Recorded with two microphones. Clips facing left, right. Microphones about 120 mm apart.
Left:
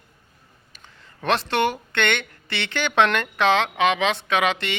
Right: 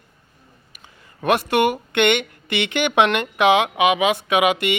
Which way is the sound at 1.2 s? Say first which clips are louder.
Right 4 dB; 10° right (ahead or behind).